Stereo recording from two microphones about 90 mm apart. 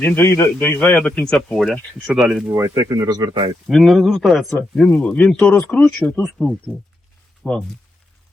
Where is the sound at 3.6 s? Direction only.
Centre (ahead or behind).